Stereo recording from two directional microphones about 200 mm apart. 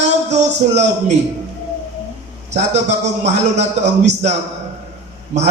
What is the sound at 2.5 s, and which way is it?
A man's voice, 35° right (ahead or behind).